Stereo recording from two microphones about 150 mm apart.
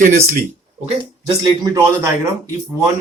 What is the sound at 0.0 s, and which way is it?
Speech, 65° right (ahead or behind).